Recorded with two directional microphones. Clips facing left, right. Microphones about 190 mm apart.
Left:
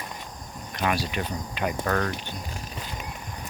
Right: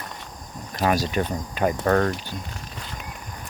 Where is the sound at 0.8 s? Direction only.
40° right (ahead or behind).